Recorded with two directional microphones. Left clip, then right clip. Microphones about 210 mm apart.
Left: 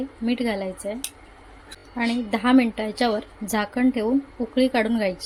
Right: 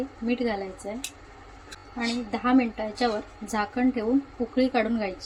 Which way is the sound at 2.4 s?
40° left (ahead or behind).